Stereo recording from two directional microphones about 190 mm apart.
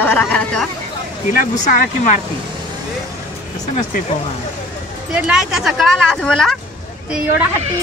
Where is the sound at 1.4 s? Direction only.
40° left (ahead or behind).